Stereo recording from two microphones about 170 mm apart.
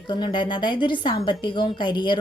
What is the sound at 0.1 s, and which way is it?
A woman's voice, 25° left (ahead or behind).